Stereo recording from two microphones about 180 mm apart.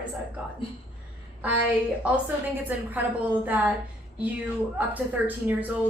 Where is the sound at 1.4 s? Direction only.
10° right (ahead or behind).